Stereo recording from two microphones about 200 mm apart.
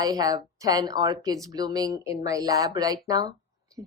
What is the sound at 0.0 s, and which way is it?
Speech, 20° right (ahead or behind).